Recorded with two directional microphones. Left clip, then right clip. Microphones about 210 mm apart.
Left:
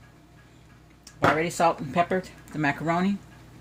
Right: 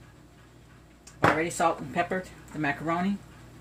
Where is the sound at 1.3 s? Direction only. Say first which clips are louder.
Left 3 dB; 45° left (ahead or behind).